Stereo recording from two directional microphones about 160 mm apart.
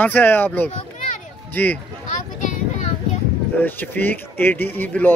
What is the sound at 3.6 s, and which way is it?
Speech, 10° left (ahead or behind).